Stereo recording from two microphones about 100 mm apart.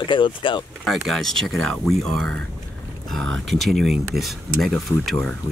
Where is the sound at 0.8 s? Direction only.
Centre (ahead or behind).